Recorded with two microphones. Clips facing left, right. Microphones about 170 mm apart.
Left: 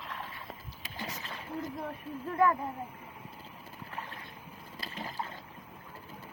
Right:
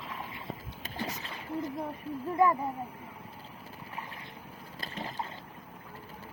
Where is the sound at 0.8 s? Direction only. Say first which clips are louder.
Right 4 dB; 45° right (ahead or behind).